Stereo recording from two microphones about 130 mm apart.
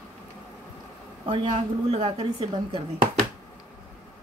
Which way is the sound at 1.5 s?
50° right (ahead or behind).